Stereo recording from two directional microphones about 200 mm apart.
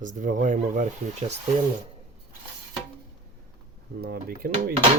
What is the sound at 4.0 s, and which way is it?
Dishes, 50° right (ahead or behind).